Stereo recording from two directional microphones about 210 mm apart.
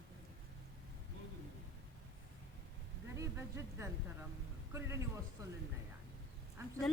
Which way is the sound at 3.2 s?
15° right (ahead or behind).